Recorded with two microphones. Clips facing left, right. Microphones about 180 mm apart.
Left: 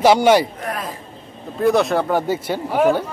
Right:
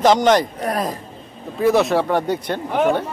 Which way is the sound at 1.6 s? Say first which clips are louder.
Even; centre (ahead or behind).